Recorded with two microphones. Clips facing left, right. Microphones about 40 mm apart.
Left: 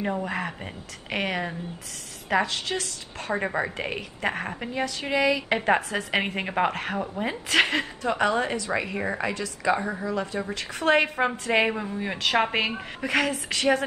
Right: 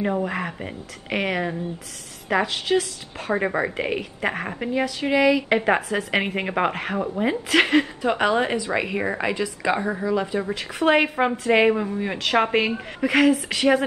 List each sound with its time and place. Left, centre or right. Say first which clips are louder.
0.0 s a woman's voice: right 4 dB; centre
8.0 s speech: right 3 dB; centre
8.3 s a woman's voice: right 4 dB; right; by 13.7 s centre